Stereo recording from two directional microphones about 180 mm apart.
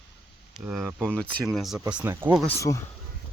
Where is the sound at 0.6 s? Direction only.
10° right (ahead or behind).